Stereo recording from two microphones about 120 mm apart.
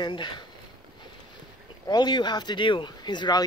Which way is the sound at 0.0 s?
40° left (ahead or behind).